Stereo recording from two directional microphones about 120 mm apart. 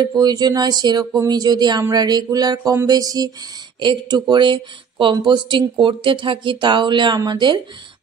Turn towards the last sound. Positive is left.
turn(degrees=-40)  # may be behind; listen again after turning